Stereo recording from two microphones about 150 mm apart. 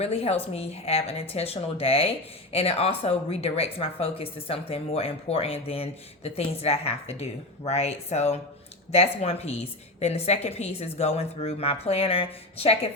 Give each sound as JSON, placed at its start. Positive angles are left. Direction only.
{"t": 0.0, "sound": "a woman's voice", "side_deg": 45}